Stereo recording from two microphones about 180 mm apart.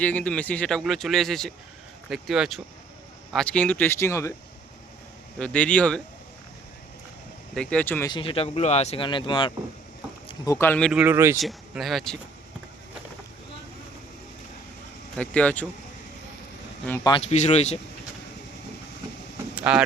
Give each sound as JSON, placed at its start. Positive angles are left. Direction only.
{"t": 0.0, "sound": "speech", "side_deg": 10}
{"t": 5.4, "sound": "speech", "side_deg": 5}
{"t": 7.5, "sound": "speech", "side_deg": 5}
{"t": 8.1, "sound": "speech", "side_deg": 30}
{"t": 11.0, "sound": "speech", "side_deg": -15}
{"t": 11.3, "sound": "speech", "side_deg": 0}
{"t": 15.1, "sound": "speech", "side_deg": 5}
{"t": 17.0, "sound": "speech", "side_deg": 25}
{"t": 17.2, "sound": "speech", "side_deg": 40}
{"t": 19.5, "sound": "vehicle", "side_deg": -5}